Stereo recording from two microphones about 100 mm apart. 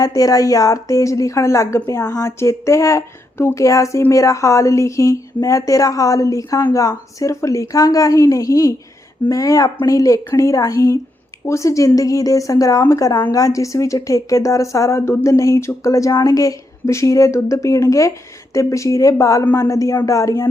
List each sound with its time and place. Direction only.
0.0 s a woman's voice: 40° left (ahead or behind)